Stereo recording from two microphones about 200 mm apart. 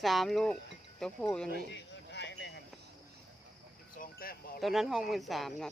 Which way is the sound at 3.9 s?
45° left (ahead or behind).